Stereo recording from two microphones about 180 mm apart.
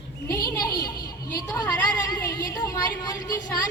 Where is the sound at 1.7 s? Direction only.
20° left (ahead or behind).